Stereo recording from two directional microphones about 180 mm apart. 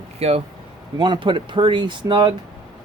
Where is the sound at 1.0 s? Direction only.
25° right (ahead or behind).